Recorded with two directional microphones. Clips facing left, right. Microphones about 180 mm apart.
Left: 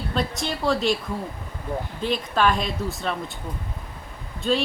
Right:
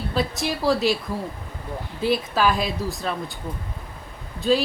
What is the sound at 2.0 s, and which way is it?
Speech, 10° right (ahead or behind).